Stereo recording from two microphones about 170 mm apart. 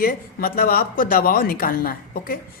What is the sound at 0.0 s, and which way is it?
A woman's voice, 60° left (ahead or behind).